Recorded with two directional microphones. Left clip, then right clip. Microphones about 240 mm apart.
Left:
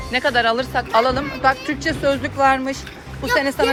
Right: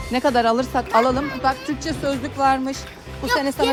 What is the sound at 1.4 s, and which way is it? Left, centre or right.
Speech, right.